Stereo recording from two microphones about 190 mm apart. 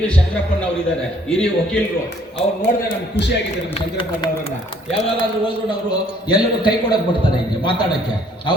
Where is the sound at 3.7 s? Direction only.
25° left (ahead or behind).